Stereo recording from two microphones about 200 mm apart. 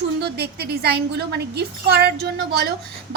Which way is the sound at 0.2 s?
55° right (ahead or behind).